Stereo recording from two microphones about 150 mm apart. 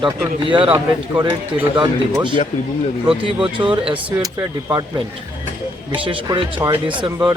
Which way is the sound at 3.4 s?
35° right (ahead or behind).